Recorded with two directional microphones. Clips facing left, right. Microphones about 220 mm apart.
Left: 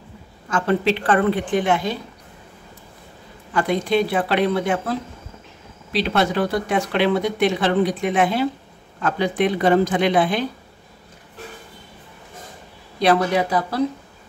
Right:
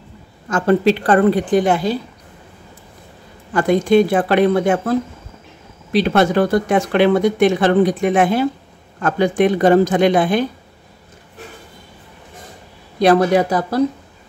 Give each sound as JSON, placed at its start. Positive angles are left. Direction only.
{"t": 0.5, "sound": "a woman's voice", "side_deg": -40}
{"t": 3.5, "sound": "speech", "side_deg": -45}
{"t": 13.0, "sound": "speech", "side_deg": -45}